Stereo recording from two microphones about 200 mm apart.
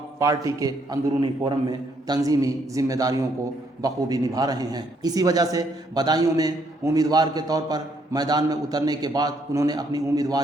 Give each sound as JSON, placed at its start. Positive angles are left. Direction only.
{"t": 0.2, "sound": "a man's voice", "side_deg": -15}